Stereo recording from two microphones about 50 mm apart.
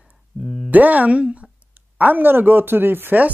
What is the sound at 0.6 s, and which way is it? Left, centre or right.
Speech, right.